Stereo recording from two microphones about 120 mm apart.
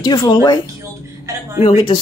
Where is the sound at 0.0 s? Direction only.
40° left (ahead or behind).